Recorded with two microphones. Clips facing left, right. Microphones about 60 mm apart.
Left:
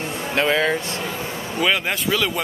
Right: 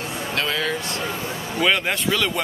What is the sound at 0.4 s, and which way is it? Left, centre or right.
Speech, left.